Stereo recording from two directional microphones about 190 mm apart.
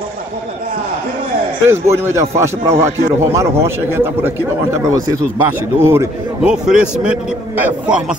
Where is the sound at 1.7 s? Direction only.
15° right (ahead or behind).